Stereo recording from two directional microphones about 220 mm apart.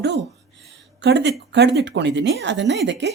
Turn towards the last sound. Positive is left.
turn(degrees=-50)  # may be behind; listen again after turning